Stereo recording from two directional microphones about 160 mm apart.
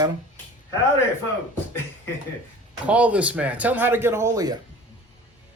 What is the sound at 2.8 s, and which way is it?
Speech, 10° right (ahead or behind).